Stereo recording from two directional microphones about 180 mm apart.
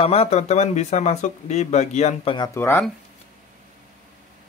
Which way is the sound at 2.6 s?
15° left (ahead or behind).